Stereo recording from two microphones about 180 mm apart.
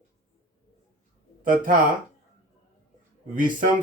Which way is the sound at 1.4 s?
50° right (ahead or behind).